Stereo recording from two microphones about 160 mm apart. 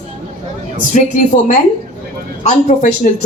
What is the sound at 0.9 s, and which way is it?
Speech, 50° left (ahead or behind).